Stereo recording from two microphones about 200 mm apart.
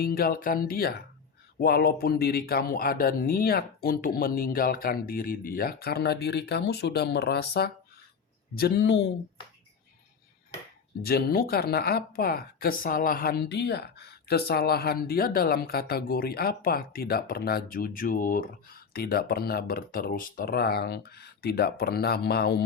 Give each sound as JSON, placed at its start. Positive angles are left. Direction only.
{"t": 0.0, "sound": "speech", "side_deg": 50}
{"t": 11.0, "sound": "speech", "side_deg": 50}